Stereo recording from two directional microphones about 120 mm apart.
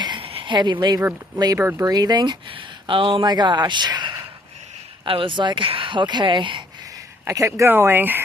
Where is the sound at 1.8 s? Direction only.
30° right (ahead or behind).